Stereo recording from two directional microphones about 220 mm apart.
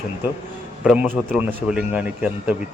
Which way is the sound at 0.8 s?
10° right (ahead or behind).